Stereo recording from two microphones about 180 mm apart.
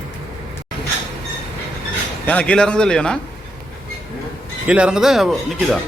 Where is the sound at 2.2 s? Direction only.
5° left (ahead or behind).